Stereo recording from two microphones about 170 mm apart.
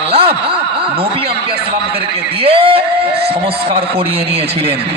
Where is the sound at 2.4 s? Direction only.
35° right (ahead or behind).